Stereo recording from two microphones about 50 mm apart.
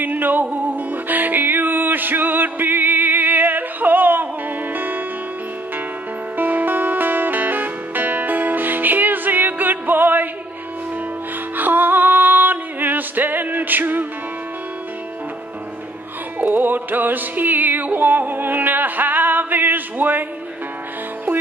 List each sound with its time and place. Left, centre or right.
0.0 s music: right
6.3 s music: right
11.5 s music: right
16.3 s music: right